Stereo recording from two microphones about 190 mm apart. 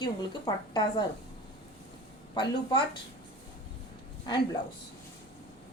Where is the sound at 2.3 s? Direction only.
25° left (ahead or behind).